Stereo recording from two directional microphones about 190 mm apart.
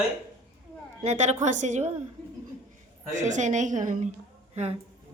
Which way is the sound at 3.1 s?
40° right (ahead or behind).